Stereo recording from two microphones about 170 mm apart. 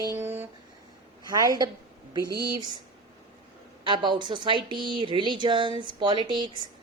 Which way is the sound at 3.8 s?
30° right (ahead or behind).